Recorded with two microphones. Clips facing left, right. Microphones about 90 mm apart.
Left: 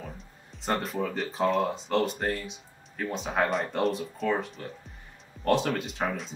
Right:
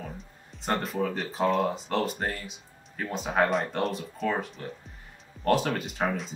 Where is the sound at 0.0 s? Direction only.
Centre (ahead or behind).